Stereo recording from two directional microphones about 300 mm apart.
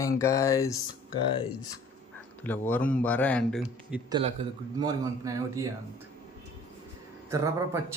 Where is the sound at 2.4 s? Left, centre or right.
Centre.